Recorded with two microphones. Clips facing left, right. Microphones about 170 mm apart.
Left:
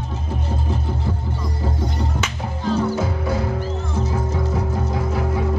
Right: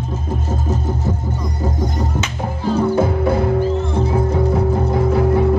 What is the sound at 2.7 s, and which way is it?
Music, 55° right (ahead or behind).